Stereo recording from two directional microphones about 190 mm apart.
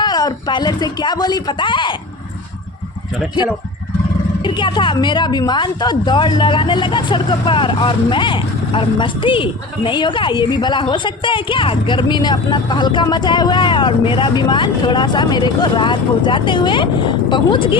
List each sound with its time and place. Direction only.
0.0 s speech: 20° left (ahead or behind)
4.4 s a woman's voice: 25° left (ahead or behind)